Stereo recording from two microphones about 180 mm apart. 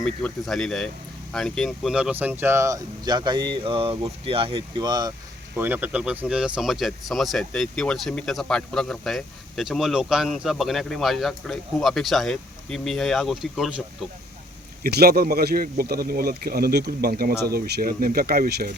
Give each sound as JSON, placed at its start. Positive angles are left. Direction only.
{"t": 0.0, "sound": "speech", "side_deg": 0}
{"t": 5.5, "sound": "speech", "side_deg": -10}
{"t": 14.8, "sound": "speech", "side_deg": -60}